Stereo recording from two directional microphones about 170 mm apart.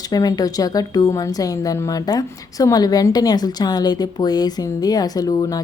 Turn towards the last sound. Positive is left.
turn(degrees=20)  # may be behind; listen again after turning